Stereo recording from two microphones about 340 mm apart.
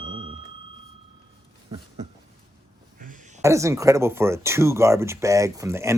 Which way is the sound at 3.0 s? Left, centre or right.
Right.